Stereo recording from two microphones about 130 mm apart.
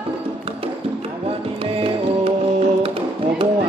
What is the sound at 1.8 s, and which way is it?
Music, 45° right (ahead or behind).